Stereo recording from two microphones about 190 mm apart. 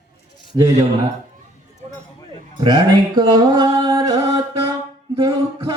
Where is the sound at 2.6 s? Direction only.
25° right (ahead or behind).